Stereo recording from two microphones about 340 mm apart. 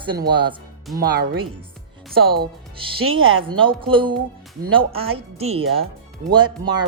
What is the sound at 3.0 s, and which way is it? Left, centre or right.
Speech, right.